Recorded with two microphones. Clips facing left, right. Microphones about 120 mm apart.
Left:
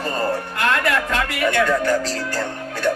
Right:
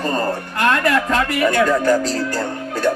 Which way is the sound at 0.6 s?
35° right (ahead or behind).